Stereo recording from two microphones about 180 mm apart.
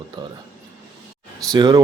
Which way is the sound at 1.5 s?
20° right (ahead or behind).